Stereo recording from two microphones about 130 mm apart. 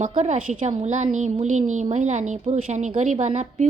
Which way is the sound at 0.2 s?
65° right (ahead or behind).